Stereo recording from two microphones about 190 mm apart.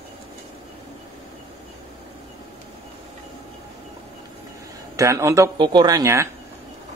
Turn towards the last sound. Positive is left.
turn(degrees=-15)  # may be behind; listen again after turning